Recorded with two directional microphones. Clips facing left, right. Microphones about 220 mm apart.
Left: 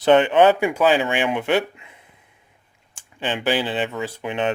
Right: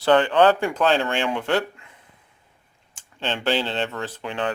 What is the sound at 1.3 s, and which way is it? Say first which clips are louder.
Speech: left 3 dB; 20° left (ahead or behind).